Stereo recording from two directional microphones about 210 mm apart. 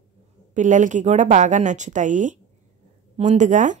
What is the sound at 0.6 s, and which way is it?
Speech, 35° right (ahead or behind).